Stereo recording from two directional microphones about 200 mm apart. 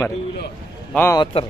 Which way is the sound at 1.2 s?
25° left (ahead or behind).